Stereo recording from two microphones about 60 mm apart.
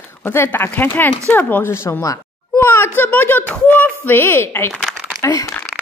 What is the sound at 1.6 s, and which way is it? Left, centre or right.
Speech, left.